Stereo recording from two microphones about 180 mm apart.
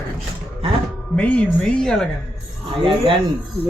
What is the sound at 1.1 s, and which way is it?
Speech, 5° left (ahead or behind).